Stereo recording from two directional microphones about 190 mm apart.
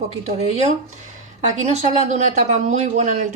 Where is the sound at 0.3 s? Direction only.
35° right (ahead or behind).